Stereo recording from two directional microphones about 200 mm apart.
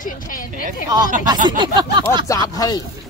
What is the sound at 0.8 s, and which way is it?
Speech, 20° right (ahead or behind).